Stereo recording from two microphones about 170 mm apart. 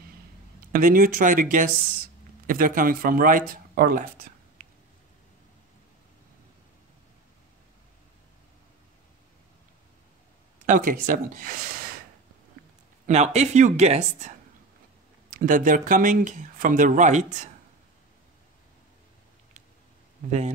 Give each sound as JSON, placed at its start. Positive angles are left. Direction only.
{"t": 0.7, "sound": "speech", "side_deg": -55}
{"t": 10.6, "sound": "speech", "side_deg": -50}
{"t": 13.0, "sound": "speech", "side_deg": -40}
{"t": 15.2, "sound": "speech", "side_deg": -50}
{"t": 20.2, "sound": "speech", "side_deg": -45}